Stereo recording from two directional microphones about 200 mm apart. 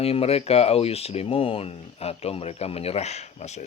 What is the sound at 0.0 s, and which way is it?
Speech, 30° left (ahead or behind).